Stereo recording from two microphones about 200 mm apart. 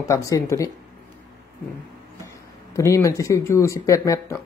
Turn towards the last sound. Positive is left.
turn(degrees=15)  # may be behind; listen again after turning